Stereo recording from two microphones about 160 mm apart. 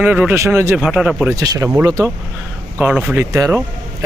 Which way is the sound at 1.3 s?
20° right (ahead or behind).